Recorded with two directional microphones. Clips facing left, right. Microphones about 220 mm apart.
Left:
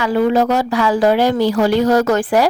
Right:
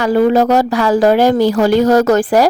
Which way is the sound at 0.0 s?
40° right (ahead or behind).